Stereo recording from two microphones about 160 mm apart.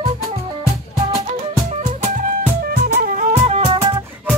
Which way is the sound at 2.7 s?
65° right (ahead or behind).